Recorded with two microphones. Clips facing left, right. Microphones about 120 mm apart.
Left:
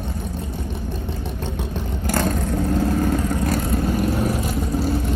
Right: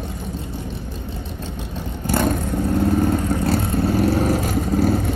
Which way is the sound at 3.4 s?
30° right (ahead or behind).